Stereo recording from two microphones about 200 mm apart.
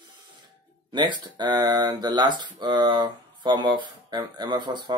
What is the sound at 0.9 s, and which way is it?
Speech, 20° right (ahead or behind).